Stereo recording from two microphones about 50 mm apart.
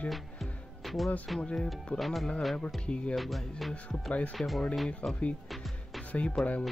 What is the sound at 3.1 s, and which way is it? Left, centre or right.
Speech, centre.